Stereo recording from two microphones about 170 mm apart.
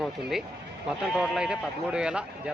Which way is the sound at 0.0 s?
Centre (ahead or behind).